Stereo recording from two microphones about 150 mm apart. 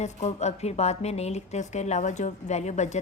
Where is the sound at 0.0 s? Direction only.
50° left (ahead or behind).